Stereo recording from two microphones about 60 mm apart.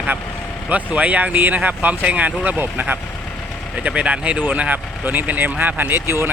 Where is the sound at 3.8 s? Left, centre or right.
Right.